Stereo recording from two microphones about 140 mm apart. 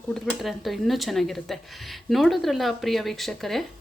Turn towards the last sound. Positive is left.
turn(degrees=0)  # may be behind; listen again after turning